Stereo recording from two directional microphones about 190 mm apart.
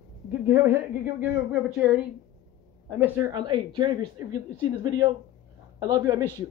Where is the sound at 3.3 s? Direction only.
20° right (ahead or behind).